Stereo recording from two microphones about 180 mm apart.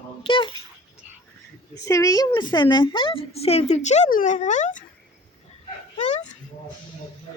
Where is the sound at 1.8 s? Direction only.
20° left (ahead or behind); by 4.8 s 45° left (ahead or behind).